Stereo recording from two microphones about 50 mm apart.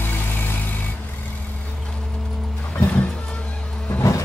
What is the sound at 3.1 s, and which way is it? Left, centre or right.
Music, left.